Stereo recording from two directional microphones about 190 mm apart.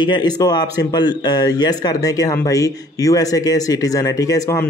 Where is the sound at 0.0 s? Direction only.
20° left (ahead or behind).